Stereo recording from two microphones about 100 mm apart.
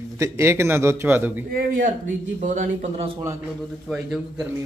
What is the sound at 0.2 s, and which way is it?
A man's voice, 25° right (ahead or behind).